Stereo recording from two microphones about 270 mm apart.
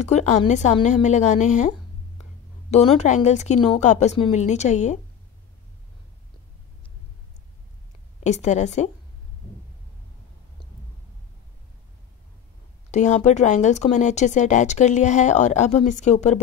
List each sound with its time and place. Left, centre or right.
0.0 s speech: left
8.2 s speech: left
12.9 s speech: left